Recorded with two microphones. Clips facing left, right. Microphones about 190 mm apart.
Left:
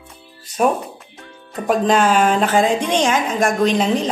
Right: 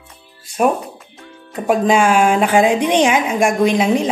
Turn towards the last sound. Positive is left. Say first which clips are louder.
# right 2 dB
turn(degrees=-10)  # may be behind; listen again after turning